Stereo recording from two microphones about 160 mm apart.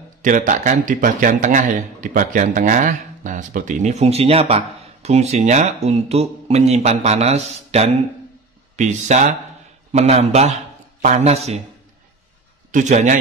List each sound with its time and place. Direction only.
0.2 s a man's voice: 55° right (ahead or behind)
12.7 s speech: 50° right (ahead or behind)